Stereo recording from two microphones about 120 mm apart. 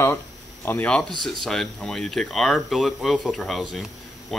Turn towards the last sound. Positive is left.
turn(degrees=0)  # may be behind; listen again after turning